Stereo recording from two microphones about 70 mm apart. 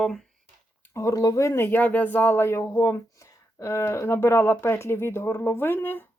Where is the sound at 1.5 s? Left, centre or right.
Left.